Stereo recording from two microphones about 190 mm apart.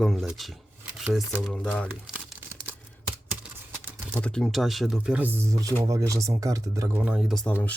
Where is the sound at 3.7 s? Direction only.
10° right (ahead or behind).